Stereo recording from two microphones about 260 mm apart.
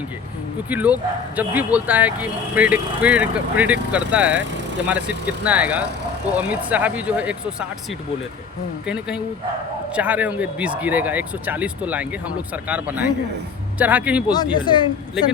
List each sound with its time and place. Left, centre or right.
0.7 s speech: centre
8.9 s speech: centre
14.3 s speech: centre